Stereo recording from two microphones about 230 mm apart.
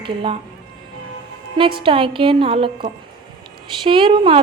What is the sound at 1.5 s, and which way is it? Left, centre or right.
A woman's voice, right.